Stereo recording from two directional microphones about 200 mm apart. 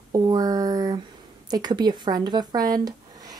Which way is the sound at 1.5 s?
20° right (ahead or behind).